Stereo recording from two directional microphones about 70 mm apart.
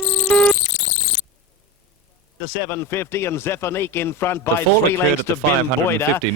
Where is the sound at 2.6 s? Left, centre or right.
Left.